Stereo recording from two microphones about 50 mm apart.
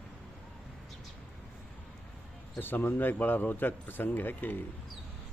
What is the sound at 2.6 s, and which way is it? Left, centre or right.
Speech, left.